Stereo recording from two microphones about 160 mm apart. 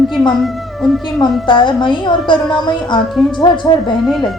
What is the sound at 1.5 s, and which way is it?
A woman's voice, 30° left (ahead or behind).